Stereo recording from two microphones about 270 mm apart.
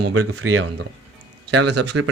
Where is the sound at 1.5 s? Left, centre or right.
Right.